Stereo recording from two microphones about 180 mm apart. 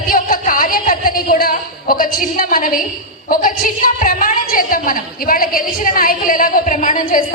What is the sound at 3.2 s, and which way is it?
A woman's voice, 50° left (ahead or behind).